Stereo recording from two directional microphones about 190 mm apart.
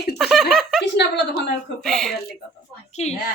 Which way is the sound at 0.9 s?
55° left (ahead or behind).